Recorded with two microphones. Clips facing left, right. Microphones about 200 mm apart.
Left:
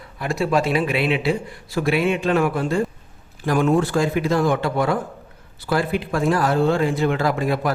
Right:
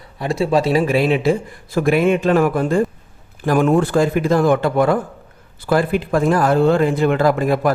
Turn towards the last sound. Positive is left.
turn(degrees=-50)  # may be behind; listen again after turning